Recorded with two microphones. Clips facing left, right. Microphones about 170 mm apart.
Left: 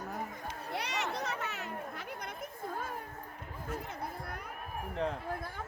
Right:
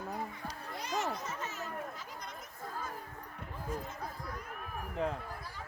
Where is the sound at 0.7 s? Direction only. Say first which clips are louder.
Even; 70° left (ahead or behind).